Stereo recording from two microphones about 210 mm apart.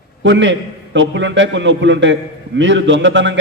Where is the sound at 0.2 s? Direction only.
60° right (ahead or behind).